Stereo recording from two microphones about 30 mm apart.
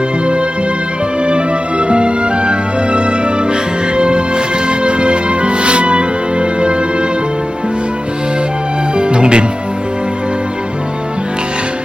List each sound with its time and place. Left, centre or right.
1.2 s music: right
9.0 s music: right